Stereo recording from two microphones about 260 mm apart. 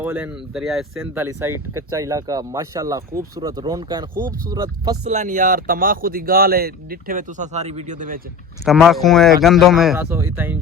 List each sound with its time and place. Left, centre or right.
0.0 s speech: centre
5.1 s speech: right
8.6 s speech: centre